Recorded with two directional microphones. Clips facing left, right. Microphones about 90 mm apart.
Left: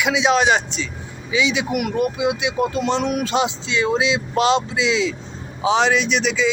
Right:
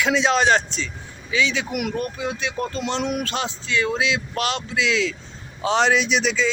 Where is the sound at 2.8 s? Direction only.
Centre (ahead or behind).